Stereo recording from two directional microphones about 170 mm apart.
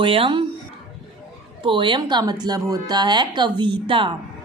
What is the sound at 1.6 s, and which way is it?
A woman's voice, 30° right (ahead or behind).